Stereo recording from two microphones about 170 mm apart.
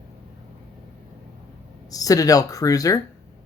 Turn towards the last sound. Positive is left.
turn(degrees=20)  # may be behind; listen again after turning